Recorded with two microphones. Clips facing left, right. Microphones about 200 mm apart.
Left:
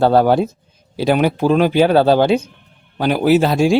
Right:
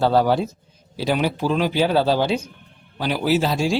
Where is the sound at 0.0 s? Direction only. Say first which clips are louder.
Left 5 dB; 55° left (ahead or behind).